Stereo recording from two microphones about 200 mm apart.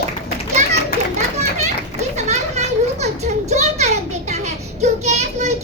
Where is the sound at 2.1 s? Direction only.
35° right (ahead or behind).